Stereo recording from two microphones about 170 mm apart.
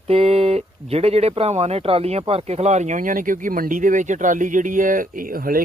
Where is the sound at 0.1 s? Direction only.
35° right (ahead or behind).